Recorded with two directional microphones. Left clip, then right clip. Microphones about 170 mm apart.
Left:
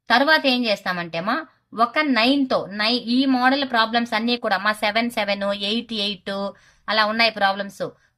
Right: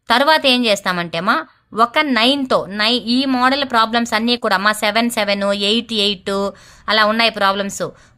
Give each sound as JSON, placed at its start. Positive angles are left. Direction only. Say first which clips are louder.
{"t": 0.1, "sound": "a woman's voice", "louder": "right 4 dB", "side_deg": -50}